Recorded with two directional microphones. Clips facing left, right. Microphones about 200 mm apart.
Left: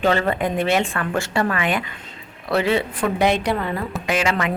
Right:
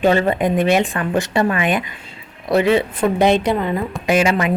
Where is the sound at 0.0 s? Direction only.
20° right (ahead or behind).